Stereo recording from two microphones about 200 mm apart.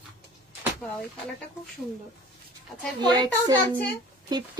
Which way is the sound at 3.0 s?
20° right (ahead or behind).